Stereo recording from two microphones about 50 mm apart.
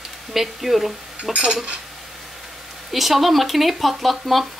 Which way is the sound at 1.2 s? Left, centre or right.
Right.